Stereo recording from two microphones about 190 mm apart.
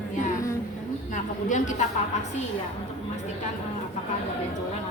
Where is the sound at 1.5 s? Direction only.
40° left (ahead or behind).